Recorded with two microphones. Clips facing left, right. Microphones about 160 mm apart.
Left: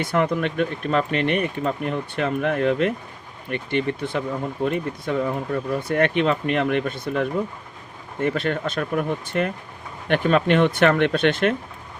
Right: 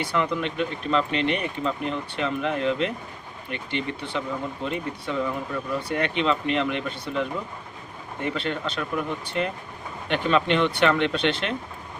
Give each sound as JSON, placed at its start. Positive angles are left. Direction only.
{"t": 0.0, "sound": "speech", "side_deg": 50}